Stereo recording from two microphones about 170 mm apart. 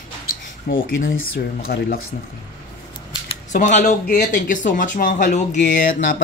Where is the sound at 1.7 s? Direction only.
70° left (ahead or behind).